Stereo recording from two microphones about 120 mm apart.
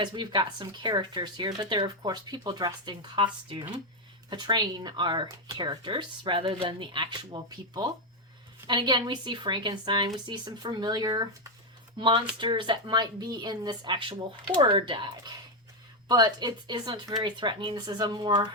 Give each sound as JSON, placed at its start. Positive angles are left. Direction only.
{"t": 0.0, "sound": "speech", "side_deg": -40}
{"t": 11.9, "sound": "speech", "side_deg": -45}